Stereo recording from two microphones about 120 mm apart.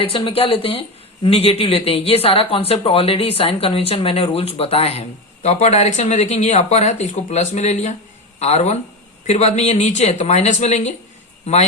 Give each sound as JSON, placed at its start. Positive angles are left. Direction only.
{"t": 0.0, "sound": "speech", "side_deg": 50}